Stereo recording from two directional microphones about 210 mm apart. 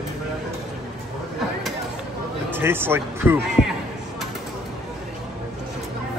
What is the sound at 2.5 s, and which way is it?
Speech, 10° right (ahead or behind).